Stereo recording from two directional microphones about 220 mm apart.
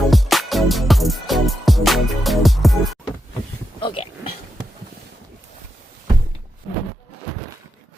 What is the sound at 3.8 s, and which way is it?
Speech, 25° left (ahead or behind).